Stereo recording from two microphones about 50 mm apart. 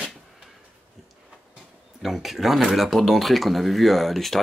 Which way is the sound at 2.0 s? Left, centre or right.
Centre.